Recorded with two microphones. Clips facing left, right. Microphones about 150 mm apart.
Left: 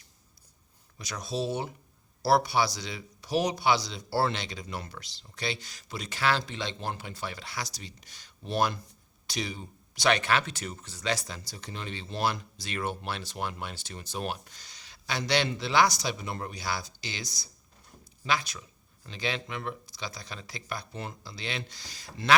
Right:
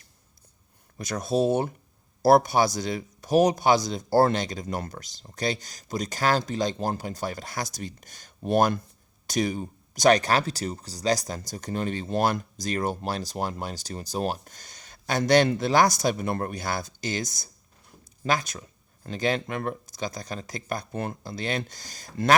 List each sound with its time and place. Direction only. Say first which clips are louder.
0.9 s speech: right 8 dB; 50° right (ahead or behind)